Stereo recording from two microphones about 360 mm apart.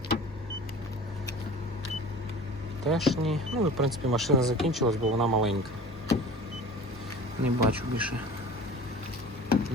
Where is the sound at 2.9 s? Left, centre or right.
Centre.